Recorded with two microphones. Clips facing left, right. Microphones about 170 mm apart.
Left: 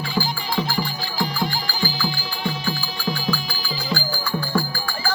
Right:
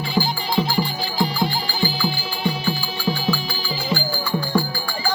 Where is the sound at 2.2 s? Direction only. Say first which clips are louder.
Right 3 dB; 5° right (ahead or behind).